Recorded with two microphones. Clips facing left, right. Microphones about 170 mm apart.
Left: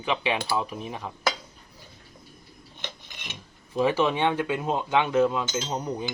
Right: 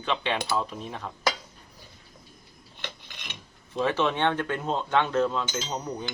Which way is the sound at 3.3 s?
10° left (ahead or behind).